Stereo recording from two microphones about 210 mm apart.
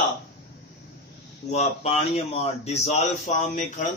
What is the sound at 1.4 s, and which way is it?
Speech, 30° left (ahead or behind).